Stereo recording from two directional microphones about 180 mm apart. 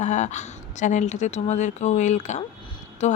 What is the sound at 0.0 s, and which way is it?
Speech, 40° left (ahead or behind).